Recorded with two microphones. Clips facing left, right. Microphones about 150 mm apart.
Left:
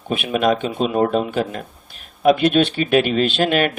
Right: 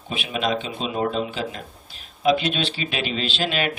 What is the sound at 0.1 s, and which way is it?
Speech, 55° left (ahead or behind).